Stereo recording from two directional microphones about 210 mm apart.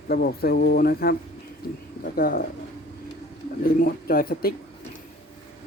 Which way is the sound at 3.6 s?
45° left (ahead or behind).